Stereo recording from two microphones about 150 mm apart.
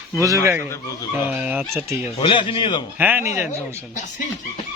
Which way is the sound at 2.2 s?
35° left (ahead or behind).